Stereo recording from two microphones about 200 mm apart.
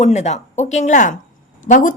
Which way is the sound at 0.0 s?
35° left (ahead or behind).